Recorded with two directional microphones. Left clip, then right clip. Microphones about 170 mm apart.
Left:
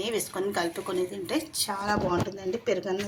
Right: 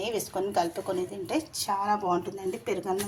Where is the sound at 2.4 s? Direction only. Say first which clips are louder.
Left 3 dB; 50° right (ahead or behind).